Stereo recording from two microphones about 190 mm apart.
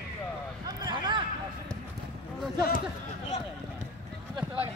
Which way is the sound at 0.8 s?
25° right (ahead or behind).